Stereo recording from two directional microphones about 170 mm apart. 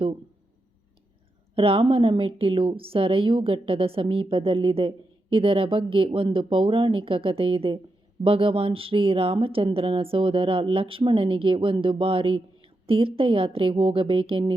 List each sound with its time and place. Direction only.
1.5 s a woman's voice: 35° right (ahead or behind)